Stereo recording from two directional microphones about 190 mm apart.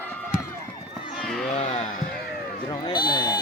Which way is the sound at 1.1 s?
Centre (ahead or behind).